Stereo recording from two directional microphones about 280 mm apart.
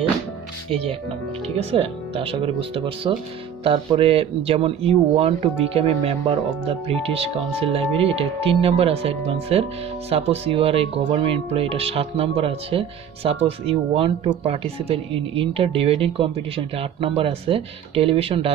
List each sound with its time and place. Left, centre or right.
1.6 s speech: right